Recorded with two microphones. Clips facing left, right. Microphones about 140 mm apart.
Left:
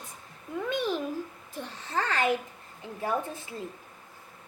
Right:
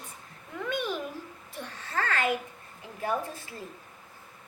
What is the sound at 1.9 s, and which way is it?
A child's voice, 15° left (ahead or behind).